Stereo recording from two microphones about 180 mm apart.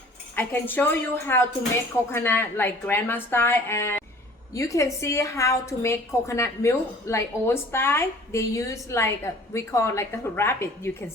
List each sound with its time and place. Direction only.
0.3 s a woman's voice: 10° left (ahead or behind)